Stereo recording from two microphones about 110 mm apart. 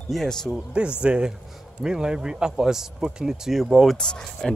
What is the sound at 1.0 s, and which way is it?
Speech, 10° right (ahead or behind).